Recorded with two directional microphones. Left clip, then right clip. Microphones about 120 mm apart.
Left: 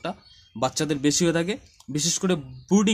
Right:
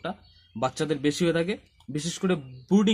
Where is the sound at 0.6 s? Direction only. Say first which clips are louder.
Left 2 dB; 25° left (ahead or behind).